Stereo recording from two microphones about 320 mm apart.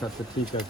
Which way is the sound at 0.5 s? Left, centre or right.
Centre.